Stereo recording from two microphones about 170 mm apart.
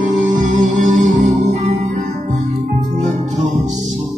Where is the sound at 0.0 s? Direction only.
50° right (ahead or behind).